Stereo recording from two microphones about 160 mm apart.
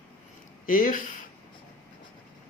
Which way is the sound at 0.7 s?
55° left (ahead or behind).